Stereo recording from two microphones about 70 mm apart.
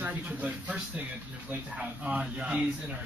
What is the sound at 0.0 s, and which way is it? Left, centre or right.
Speech, right.